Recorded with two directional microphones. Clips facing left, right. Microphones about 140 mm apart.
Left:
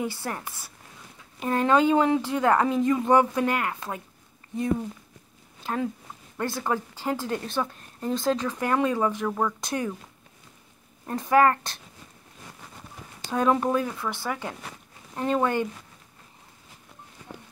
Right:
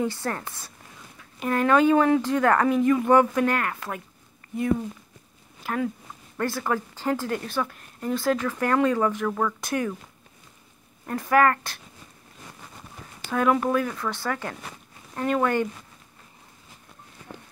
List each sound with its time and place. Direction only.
0.0 s a woman's voice: 10° left (ahead or behind)
1.4 s speech: 25° left (ahead or behind)
5.6 s a woman's voice: 25° left (ahead or behind)
11.1 s speech: 20° left (ahead or behind)
13.3 s a woman's voice: 25° left (ahead or behind)